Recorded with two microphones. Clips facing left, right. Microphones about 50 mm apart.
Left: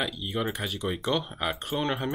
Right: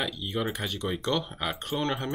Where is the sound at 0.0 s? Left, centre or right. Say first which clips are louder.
Left 1 dB; centre.